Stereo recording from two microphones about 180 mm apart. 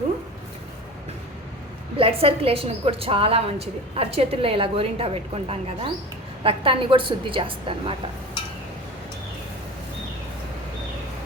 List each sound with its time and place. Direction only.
2.0 s a woman's voice: 30° right (ahead or behind)